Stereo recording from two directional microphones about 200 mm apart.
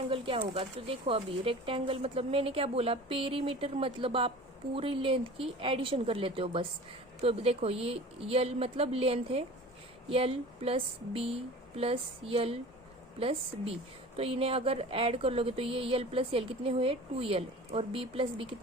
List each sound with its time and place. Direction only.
0.1 s speech: 25° right (ahead or behind)